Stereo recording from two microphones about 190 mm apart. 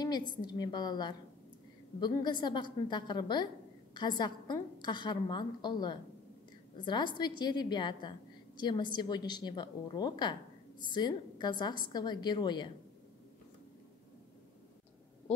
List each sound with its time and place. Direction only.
0.3 s a woman's voice: 25° left (ahead or behind)